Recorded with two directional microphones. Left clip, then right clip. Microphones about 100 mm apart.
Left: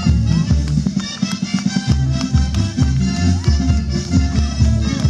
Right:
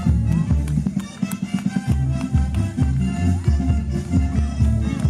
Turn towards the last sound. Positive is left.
turn(degrees=20)  # may be behind; listen again after turning